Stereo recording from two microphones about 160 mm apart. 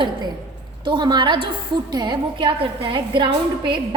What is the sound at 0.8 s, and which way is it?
A woman's voice, 30° right (ahead or behind).